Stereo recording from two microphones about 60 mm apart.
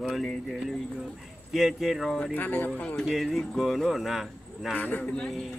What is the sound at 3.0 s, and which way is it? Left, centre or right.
Speech, centre.